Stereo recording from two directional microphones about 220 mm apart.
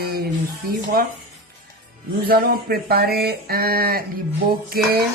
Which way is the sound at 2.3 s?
45° right (ahead or behind).